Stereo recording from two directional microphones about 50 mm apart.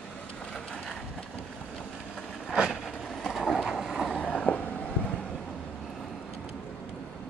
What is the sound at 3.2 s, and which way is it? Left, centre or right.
Train, centre.